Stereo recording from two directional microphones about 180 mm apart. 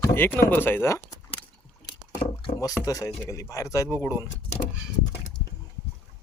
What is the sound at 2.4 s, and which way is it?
Speech, 20° left (ahead or behind).